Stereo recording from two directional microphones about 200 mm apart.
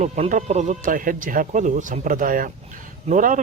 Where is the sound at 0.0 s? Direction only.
35° right (ahead or behind).